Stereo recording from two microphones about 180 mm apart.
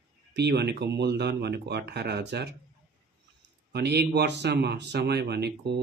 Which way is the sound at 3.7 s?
65° right (ahead or behind).